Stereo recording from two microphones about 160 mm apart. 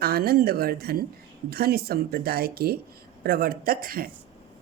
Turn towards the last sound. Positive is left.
turn(degrees=-65)  # may be behind; listen again after turning